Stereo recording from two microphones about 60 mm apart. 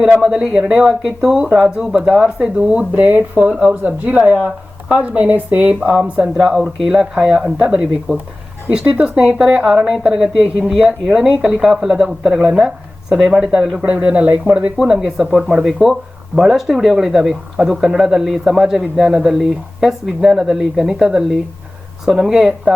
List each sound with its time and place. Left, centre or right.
0.2 s speech: centre
6.3 s speech: centre; by 9.2 s right
9.2 s speech: centre
13.8 s speech: centre
14.8 s speech: centre